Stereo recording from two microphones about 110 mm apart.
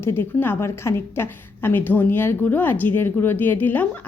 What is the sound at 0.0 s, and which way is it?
A woman's voice, 20° left (ahead or behind).